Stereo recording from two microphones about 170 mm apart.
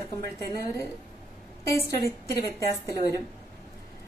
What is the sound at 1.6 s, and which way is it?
Speech, 15° left (ahead or behind).